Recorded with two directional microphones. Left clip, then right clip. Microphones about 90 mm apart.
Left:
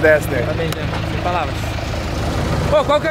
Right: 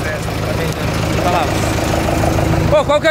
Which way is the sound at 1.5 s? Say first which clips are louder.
Right 8 dB; 40° right (ahead or behind).